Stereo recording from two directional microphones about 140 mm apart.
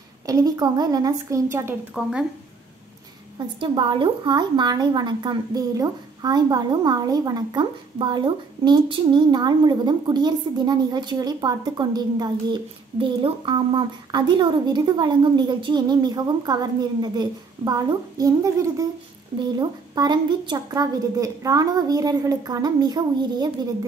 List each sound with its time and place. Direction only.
0.3 s a woman's voice: 25° right (ahead or behind)
2.0 s speech: 5° right (ahead or behind)
3.5 s a woman's voice: 35° right (ahead or behind)